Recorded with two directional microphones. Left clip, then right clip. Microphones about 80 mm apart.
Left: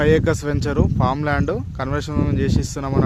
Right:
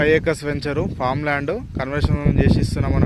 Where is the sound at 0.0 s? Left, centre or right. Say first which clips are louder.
Even; left.